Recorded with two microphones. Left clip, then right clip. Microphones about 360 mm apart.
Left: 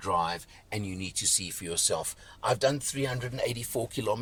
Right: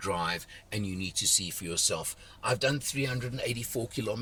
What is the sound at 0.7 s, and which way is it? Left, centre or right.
Speech, centre.